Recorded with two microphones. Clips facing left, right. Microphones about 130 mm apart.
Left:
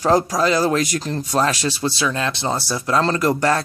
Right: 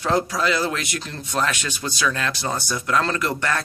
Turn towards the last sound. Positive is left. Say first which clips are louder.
# left 6 dB
turn(degrees=35)  # may be behind; listen again after turning